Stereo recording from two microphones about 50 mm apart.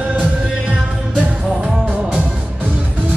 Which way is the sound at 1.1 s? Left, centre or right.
Centre.